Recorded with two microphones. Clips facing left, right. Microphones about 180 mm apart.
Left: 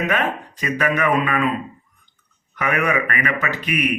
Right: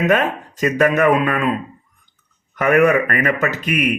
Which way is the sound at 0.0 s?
45° right (ahead or behind).